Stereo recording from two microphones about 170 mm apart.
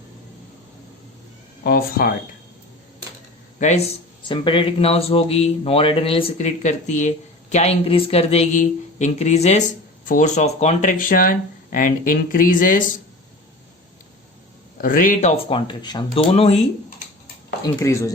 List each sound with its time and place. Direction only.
1.6 s speech: 65° left (ahead or behind)
3.6 s speech: 45° left (ahead or behind)
4.3 s speech: 30° left (ahead or behind); by 12.8 s 50° left (ahead or behind)
14.8 s speech: 55° left (ahead or behind); by 16.6 s 35° left (ahead or behind)
17.6 s speech: 15° left (ahead or behind)